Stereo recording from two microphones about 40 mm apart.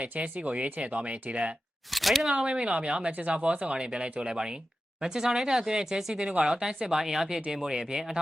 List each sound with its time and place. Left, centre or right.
0.0 s speech: right
1.9 s speech: centre
2.4 s speech: right; by 6.1 s centre
6.4 s speech: centre